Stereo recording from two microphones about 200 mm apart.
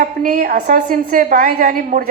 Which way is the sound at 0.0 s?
45° right (ahead or behind).